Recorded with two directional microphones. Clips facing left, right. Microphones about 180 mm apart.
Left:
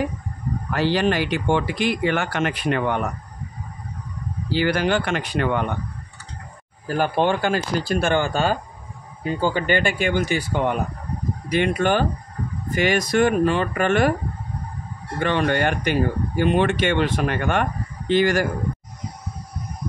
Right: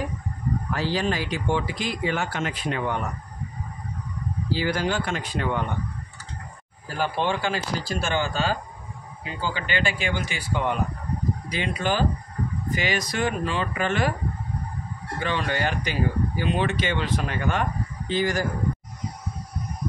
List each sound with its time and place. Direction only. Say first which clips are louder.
0.7 s speech: left 7 dB; 70° left (ahead or behind)
4.5 s speech: left 5 dB; 70° left (ahead or behind)
6.9 s speech: left 5 dB; 55° left (ahead or behind)
15.1 s speech: left 6 dB; 60° left (ahead or behind)